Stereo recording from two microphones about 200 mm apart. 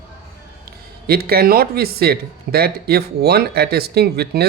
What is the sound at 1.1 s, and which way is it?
Speech, 50° right (ahead or behind).